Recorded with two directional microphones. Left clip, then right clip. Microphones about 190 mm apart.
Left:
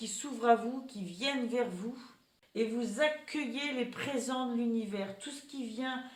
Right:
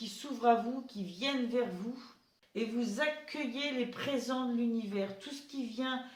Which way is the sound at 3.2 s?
40° left (ahead or behind).